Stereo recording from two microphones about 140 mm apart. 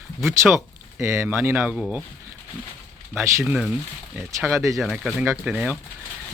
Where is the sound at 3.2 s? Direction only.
20° right (ahead or behind).